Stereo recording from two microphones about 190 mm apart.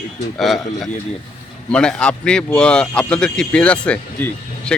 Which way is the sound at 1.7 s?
5° left (ahead or behind).